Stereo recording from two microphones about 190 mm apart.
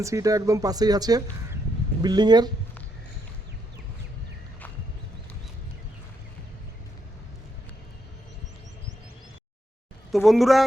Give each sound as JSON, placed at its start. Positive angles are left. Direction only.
{"t": 0.0, "sound": "speech", "side_deg": -15}
{"t": 10.1, "sound": "speech", "side_deg": 0}